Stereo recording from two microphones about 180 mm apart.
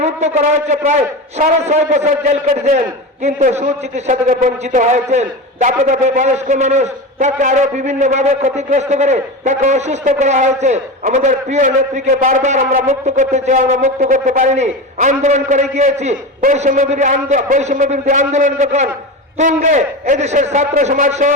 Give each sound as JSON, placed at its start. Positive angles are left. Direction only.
{"t": 0.0, "sound": "a man's voice", "side_deg": -40}